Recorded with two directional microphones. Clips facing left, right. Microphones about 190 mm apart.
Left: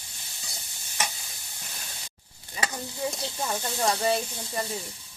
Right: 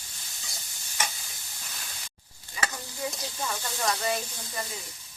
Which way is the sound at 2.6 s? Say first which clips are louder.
Left 3 dB; 25° left (ahead or behind).